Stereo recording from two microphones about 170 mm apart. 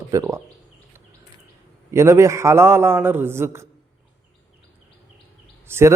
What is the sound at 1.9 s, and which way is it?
Speech, 15° right (ahead or behind).